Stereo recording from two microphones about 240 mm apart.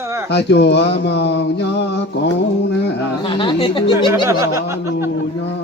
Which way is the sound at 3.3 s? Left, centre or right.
Centre.